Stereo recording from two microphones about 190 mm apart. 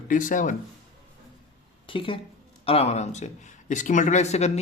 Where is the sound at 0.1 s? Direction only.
45° left (ahead or behind).